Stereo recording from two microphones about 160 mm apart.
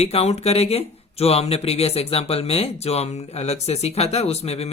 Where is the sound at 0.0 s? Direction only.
40° left (ahead or behind).